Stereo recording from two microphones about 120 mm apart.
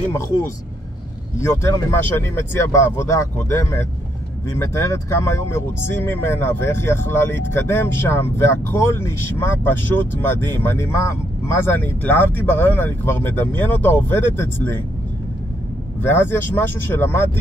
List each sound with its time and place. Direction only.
1.4 s speech: 20° left (ahead or behind)
16.0 s speech: 20° left (ahead or behind)